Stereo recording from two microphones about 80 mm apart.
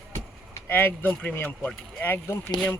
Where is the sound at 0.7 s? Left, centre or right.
Left.